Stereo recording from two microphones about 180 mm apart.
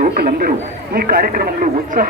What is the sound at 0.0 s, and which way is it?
A man's voice, 55° right (ahead or behind).